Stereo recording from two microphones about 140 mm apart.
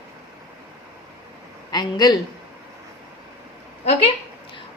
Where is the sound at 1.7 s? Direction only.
30° left (ahead or behind).